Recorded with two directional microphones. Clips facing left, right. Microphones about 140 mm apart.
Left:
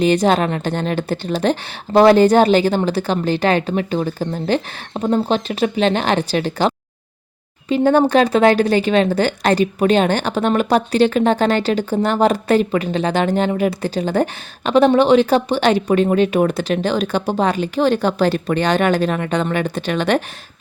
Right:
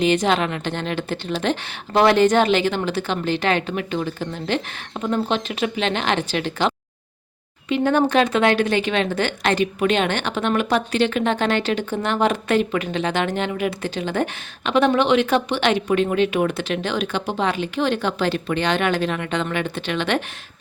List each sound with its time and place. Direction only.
0.0 s a woman's voice: 40° left (ahead or behind)